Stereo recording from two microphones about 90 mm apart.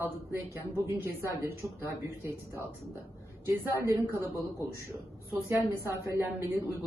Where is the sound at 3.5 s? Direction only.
30° right (ahead or behind).